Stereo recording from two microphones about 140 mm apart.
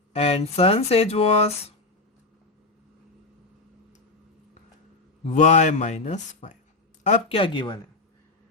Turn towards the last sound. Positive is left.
turn(degrees=35)  # may be behind; listen again after turning